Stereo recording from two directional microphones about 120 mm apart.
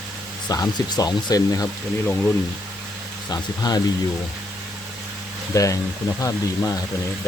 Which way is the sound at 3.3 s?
35° left (ahead or behind).